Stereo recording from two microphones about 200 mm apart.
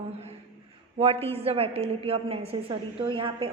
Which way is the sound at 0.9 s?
30° right (ahead or behind).